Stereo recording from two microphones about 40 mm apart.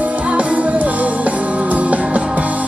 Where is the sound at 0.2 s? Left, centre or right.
Right.